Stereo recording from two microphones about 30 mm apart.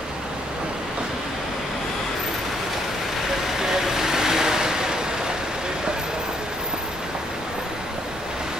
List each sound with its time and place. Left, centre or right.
3.6 s vehicle: centre